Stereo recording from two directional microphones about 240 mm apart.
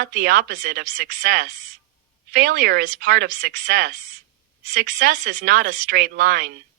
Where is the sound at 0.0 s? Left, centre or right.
Right.